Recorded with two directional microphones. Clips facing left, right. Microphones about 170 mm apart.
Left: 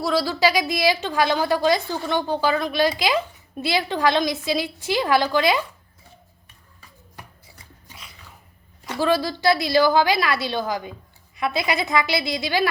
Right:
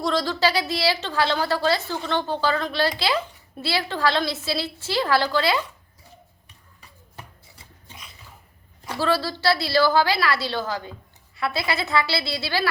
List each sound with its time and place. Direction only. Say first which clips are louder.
0.0 s a woman's voice: left 2 dB; 10° left (ahead or behind)
9.0 s a woman's voice: left 2 dB; 15° left (ahead or behind)